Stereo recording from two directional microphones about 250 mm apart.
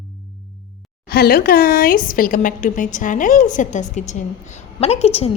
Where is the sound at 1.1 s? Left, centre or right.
Left.